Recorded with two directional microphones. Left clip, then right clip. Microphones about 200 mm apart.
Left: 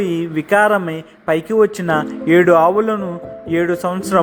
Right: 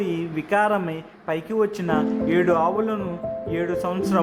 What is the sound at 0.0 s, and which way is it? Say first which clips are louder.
A man's voice: left 7 dB; 20° left (ahead or behind).